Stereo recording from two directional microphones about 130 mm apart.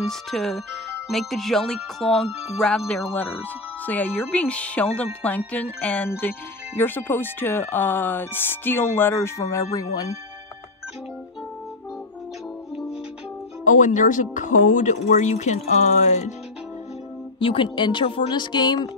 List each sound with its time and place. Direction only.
0.0 s speech: centre (ahead or behind); by 10.0 s 25° left (ahead or behind)
13.7 s speech: 75° left (ahead or behind)
17.4 s speech: 40° left (ahead or behind)